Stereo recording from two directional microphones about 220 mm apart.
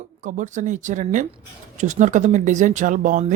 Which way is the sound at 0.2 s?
35° right (ahead or behind).